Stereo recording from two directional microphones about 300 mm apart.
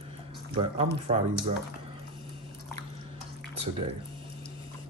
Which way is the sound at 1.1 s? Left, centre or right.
Right.